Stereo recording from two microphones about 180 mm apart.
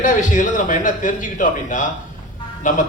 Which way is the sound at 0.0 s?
50° left (ahead or behind).